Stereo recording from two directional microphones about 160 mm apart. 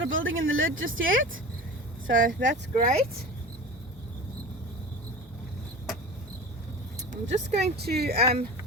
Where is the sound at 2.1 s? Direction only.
55° right (ahead or behind).